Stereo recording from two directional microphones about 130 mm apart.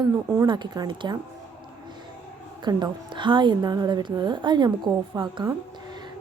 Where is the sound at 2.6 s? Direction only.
35° right (ahead or behind).